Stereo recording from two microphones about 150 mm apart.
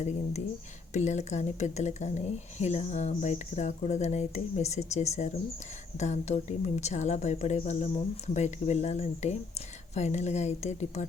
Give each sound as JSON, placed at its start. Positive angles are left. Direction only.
{"t": 0.9, "sound": "speech", "side_deg": 50}